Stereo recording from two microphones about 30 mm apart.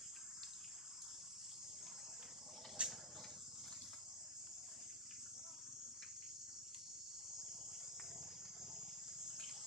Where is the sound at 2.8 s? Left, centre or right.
Right.